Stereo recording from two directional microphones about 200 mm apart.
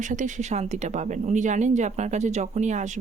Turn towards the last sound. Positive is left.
turn(degrees=-35)  # may be behind; listen again after turning